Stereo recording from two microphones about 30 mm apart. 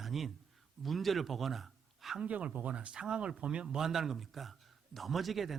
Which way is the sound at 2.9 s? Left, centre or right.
Right.